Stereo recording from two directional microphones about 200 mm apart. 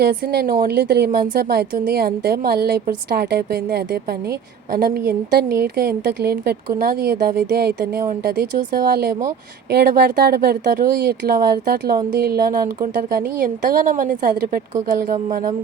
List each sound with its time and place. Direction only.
0.0 s a woman's voice: 50° right (ahead or behind)